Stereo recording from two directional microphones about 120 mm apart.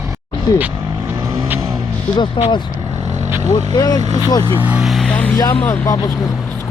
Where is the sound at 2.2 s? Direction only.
40° left (ahead or behind).